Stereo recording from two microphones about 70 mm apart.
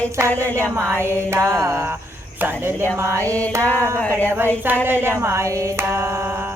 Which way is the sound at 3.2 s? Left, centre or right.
Left.